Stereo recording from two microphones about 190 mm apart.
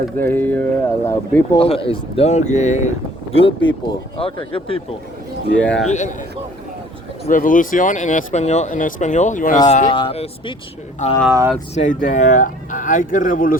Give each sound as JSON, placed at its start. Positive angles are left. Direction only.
{"t": 0.2, "sound": "speech", "side_deg": 10}
{"t": 1.5, "sound": "speech", "side_deg": 30}
{"t": 3.3, "sound": "speech", "side_deg": 25}
{"t": 5.5, "sound": "speech", "side_deg": 5}
{"t": 5.9, "sound": "speech", "side_deg": 40}
{"t": 7.3, "sound": "speech", "side_deg": 45}
{"t": 9.9, "sound": "speech", "side_deg": 30}
{"t": 11.3, "sound": "speech", "side_deg": -15}
{"t": 11.7, "sound": "speech", "side_deg": 40}